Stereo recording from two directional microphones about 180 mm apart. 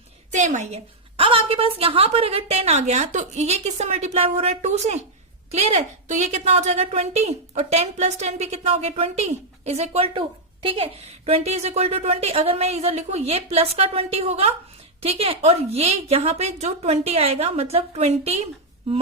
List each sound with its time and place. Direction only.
0.3 s a woman's voice: 40° right (ahead or behind)